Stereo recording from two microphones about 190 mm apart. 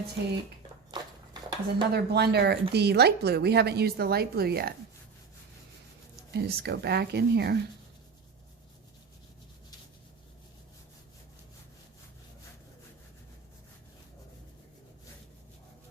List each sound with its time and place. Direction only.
0.9 s a sound: 25° right (ahead or behind)
1.9 s speech: 60° right (ahead or behind)
6.3 s speech: 60° right (ahead or behind)